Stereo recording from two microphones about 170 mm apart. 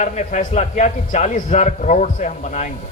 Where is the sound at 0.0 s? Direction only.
45° left (ahead or behind).